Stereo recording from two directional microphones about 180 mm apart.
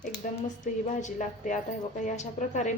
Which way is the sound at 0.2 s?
50° left (ahead or behind).